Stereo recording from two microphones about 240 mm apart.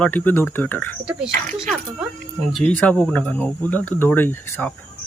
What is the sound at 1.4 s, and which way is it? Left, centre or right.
Speech, right.